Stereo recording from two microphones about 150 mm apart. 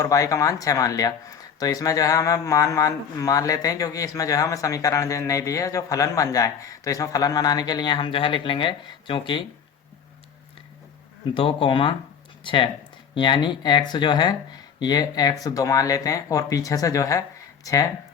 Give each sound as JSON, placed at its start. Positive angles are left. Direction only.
{"t": 0.0, "sound": "a man's voice", "side_deg": 20}
{"t": 11.3, "sound": "speech", "side_deg": 35}
{"t": 13.1, "sound": "a man's voice", "side_deg": 30}